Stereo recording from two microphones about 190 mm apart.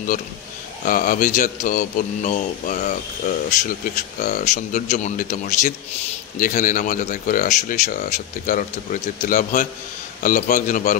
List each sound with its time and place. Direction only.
0.8 s a man's voice: 45° left (ahead or behind)